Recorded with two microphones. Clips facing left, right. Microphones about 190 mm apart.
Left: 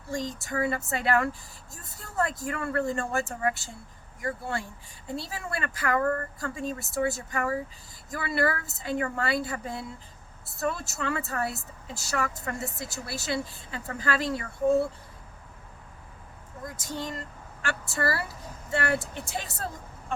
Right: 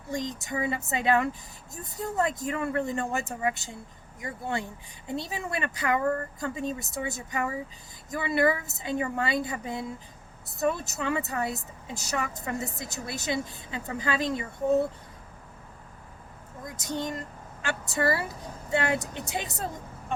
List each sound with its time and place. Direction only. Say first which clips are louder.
0.1 s a woman's voice: even; 20° right (ahead or behind)
16.6 s a woman's voice: right 3 dB; 20° right (ahead or behind)